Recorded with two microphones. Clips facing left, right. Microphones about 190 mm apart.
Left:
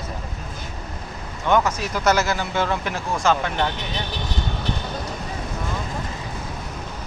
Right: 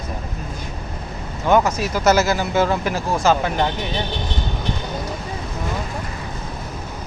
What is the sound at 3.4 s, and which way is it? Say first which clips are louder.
Speech: right 3 dB; 15° right (ahead or behind).